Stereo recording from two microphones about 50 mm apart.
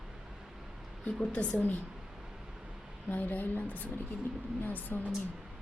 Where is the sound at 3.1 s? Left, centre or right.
Left.